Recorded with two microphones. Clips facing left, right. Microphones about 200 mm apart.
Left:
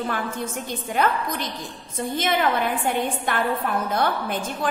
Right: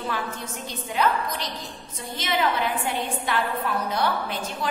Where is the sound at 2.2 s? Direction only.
50° left (ahead or behind).